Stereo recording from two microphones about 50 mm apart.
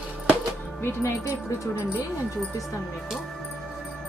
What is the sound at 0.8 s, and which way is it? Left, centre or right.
Speech, left.